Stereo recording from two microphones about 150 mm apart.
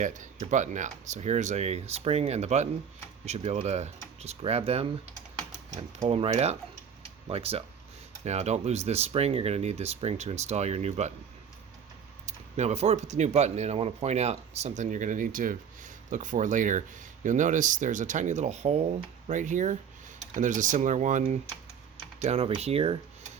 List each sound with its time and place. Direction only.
0.0 s speech: 55° right (ahead or behind)
6.1 s speech: 40° right (ahead or behind)
12.2 s speech: 50° right (ahead or behind)
22.2 s speech: 45° right (ahead or behind)